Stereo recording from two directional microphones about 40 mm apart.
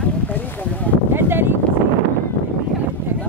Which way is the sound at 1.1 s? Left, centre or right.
Right.